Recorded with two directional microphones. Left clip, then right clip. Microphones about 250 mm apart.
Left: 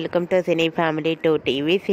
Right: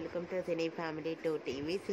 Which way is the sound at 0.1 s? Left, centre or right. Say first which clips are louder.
Left 18 dB; left.